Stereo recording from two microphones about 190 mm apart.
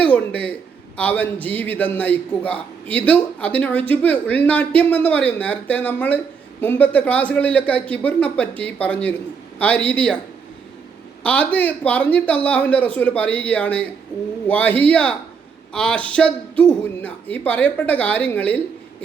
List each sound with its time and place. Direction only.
0.0 s a man's voice: 5° left (ahead or behind)
11.2 s a man's voice: 5° left (ahead or behind)